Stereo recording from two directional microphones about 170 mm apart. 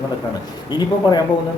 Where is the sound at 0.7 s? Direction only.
25° left (ahead or behind).